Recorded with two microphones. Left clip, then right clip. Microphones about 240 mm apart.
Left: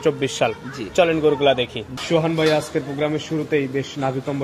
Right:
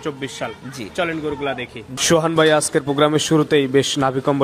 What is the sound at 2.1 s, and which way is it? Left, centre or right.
A man's voice, right.